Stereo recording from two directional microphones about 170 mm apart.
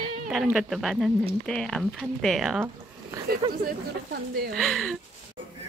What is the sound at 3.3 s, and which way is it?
A woman's voice, 60° right (ahead or behind).